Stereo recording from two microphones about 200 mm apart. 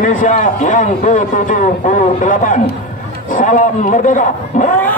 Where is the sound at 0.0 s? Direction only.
40° left (ahead or behind).